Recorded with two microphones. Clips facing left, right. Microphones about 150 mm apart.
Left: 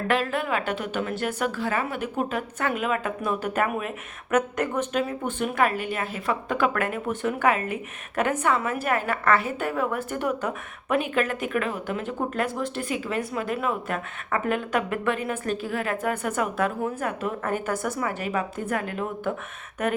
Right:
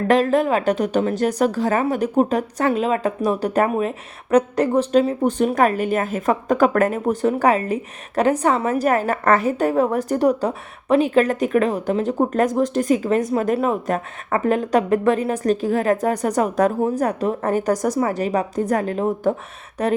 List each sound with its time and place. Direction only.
0.1 s a woman's voice: 40° right (ahead or behind)